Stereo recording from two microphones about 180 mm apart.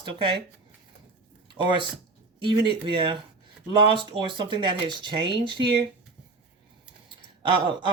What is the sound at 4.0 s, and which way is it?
Speech, 25° right (ahead or behind).